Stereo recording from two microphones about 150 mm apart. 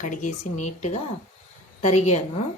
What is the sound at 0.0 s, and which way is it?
A woman's voice, 55° left (ahead or behind).